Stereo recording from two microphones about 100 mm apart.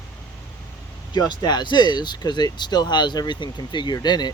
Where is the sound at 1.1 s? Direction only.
45° left (ahead or behind).